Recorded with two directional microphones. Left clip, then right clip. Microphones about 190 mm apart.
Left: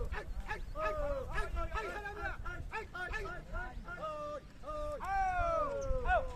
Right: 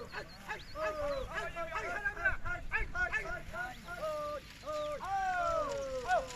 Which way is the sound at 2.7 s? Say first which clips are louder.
Right 7 dB; 45° left (ahead or behind).